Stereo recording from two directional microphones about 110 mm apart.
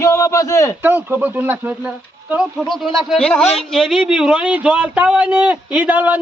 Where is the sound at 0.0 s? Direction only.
30° left (ahead or behind).